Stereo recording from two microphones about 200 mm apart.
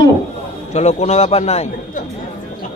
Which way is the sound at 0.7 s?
35° left (ahead or behind).